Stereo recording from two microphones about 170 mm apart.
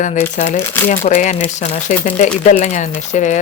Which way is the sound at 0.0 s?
45° left (ahead or behind).